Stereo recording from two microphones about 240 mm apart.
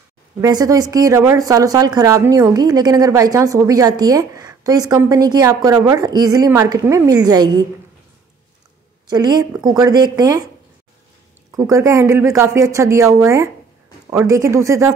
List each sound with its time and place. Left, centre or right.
0.4 s a woman's voice: centre
9.1 s a woman's voice: centre
11.5 s a woman's voice: centre